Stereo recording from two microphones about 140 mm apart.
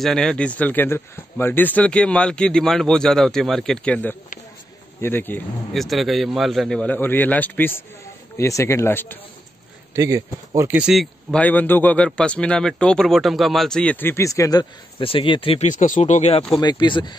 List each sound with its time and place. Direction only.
0.0 s a man's voice: 5° left (ahead or behind)
5.8 s a man's voice: centre (ahead or behind); by 9.2 s 15° left (ahead or behind)
9.9 s speech: 20° right (ahead or behind)
10.7 s speech: 5° right (ahead or behind)
11.3 s a man's voice: 10° left (ahead or behind); by 15.7 s 40° left (ahead or behind)
15.7 s speech: 65° left (ahead or behind); by 16.4 s 50° left (ahead or behind)
16.6 s speech: 35° left (ahead or behind)